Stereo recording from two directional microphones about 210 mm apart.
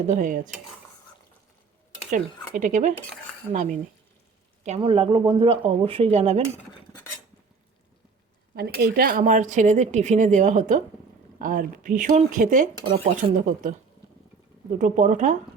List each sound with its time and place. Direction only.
0.1 s speech: 40° right (ahead or behind)
2.0 s speech: 40° right (ahead or behind)
8.5 s speech: 50° right (ahead or behind)
12.8 s speech: 25° right (ahead or behind)
14.8 s speech: 35° right (ahead or behind)